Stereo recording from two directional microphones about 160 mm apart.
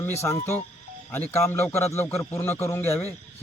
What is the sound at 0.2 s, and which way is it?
A man's voice, 15° left (ahead or behind).